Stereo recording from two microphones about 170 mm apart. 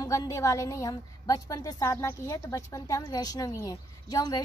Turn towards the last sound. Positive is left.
turn(degrees=25)  # may be behind; listen again after turning